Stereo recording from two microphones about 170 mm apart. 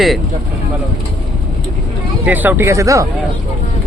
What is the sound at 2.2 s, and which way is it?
Speech, 10° right (ahead or behind).